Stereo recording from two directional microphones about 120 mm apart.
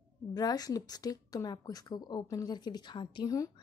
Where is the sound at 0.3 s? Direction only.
35° left (ahead or behind).